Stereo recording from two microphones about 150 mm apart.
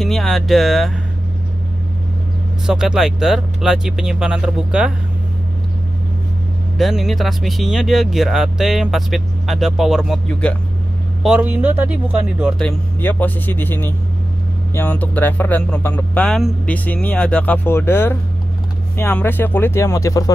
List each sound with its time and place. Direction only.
0.0 s speech: centre (ahead or behind)
2.6 s speech: 5° right (ahead or behind)
6.8 s speech: centre (ahead or behind)
11.2 s speech: 10° right (ahead or behind)
12.5 s speech: 10° left (ahead or behind)